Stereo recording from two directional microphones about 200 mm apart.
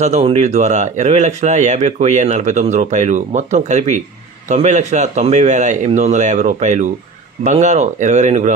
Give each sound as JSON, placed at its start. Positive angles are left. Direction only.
{"t": 0.0, "sound": "speech", "side_deg": -30}